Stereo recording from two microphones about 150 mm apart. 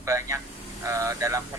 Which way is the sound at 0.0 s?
20° right (ahead or behind).